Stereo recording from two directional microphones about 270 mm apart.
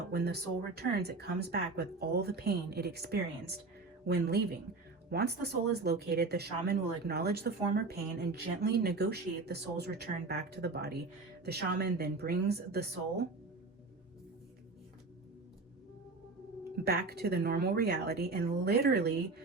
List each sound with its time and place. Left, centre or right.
0.1 s speech: right
16.8 s speech: right